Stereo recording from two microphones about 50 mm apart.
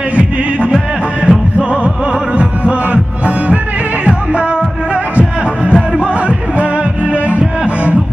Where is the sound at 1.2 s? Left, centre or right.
Centre.